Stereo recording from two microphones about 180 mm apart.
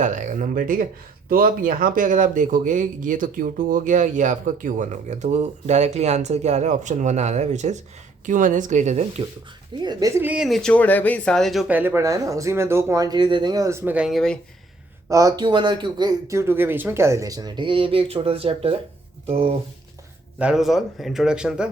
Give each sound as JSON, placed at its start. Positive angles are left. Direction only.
{"t": 0.0, "sound": "a man's voice", "side_deg": -45}
{"t": 9.7, "sound": "speech", "side_deg": -25}
{"t": 11.7, "sound": "speech", "side_deg": -10}
{"t": 15.1, "sound": "speech", "side_deg": -20}
{"t": 20.4, "sound": "speech", "side_deg": -5}